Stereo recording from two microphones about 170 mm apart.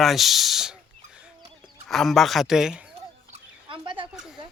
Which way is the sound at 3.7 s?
30° right (ahead or behind).